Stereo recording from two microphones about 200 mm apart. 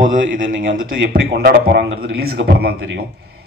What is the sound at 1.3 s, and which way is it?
A man's voice, 55° right (ahead or behind).